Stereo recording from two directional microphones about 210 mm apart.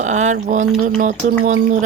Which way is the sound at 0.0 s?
35° right (ahead or behind).